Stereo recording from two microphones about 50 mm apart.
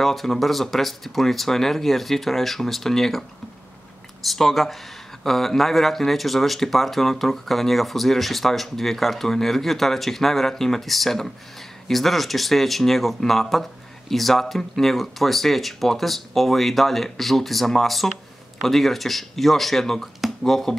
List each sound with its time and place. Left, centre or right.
0.0 s speech: centre